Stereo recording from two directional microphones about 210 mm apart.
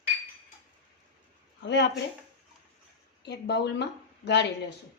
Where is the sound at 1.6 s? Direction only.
55° left (ahead or behind).